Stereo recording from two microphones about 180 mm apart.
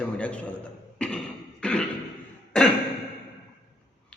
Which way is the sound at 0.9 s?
5° left (ahead or behind).